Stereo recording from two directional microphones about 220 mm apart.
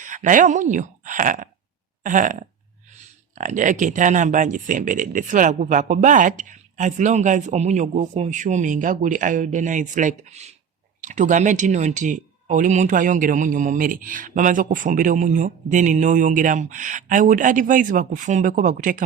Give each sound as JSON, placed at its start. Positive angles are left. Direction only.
{"t": 0.0, "sound": "speech", "side_deg": -35}